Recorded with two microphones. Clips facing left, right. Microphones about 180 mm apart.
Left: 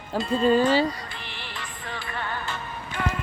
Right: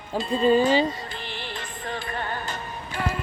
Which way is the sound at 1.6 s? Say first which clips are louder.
Right 2 dB; 45° right (ahead or behind).